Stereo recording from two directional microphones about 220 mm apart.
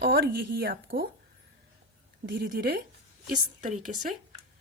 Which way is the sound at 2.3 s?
45° right (ahead or behind).